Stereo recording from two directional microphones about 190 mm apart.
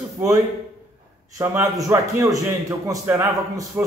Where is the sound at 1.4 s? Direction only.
15° right (ahead or behind).